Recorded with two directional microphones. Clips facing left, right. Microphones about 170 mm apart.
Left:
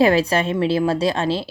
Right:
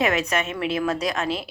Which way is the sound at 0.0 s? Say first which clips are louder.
Left 7 dB; 30° left (ahead or behind).